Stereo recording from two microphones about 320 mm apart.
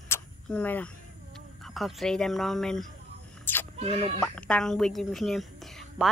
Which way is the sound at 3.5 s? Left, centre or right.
Centre.